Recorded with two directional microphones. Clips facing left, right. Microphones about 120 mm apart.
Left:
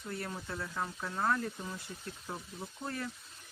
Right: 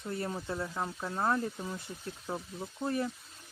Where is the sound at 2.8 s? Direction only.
20° right (ahead or behind).